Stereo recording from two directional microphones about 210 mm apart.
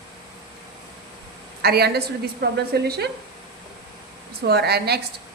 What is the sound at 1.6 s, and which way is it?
A woman's voice, 50° right (ahead or behind).